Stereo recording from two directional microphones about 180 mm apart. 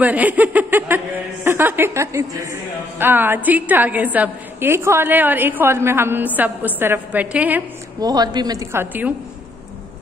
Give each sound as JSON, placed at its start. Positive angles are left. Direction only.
{"t": 0.0, "sound": "a woman's voice", "side_deg": -10}
{"t": 8.0, "sound": "a woman's voice", "side_deg": -20}